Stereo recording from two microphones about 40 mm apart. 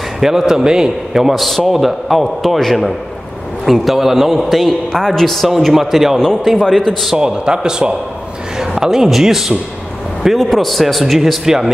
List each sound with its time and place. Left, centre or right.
0.2 s a man's voice: centre
1.3 s a man's voice: centre
6.6 s a man's voice: centre
7.2 s a man's voice: centre
10.3 s a man's voice: centre